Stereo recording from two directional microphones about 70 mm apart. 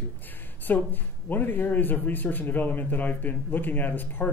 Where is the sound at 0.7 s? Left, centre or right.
Left.